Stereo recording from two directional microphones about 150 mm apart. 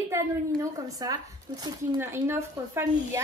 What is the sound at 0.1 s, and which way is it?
Speech, 20° right (ahead or behind).